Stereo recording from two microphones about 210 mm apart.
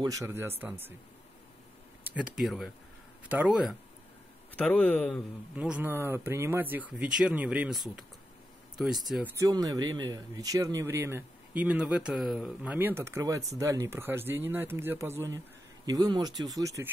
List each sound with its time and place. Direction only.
0.0 s speech: 15° right (ahead or behind)
2.0 s speech: 5° right (ahead or behind)
4.6 s a man's voice: 5° left (ahead or behind)
5.5 s speech: 5° right (ahead or behind)
9.4 s speech: 20° right (ahead or behind)